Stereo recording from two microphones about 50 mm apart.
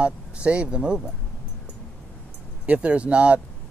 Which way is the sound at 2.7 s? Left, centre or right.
Right.